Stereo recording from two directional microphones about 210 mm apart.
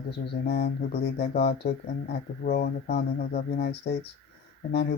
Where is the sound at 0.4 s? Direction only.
50° left (ahead or behind).